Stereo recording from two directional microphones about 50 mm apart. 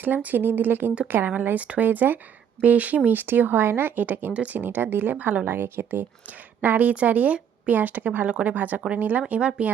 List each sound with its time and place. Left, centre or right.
0.0 s speech: right
5.1 s a woman's voice: right
5.5 s a woman's voice: right
6.6 s speech: right
7.7 s speech: right
8.3 s a woman's voice: right
8.5 s speech: right
9.6 s a woman's voice: right